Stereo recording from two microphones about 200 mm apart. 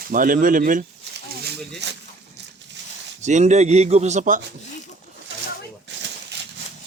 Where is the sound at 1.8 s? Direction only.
60° right (ahead or behind).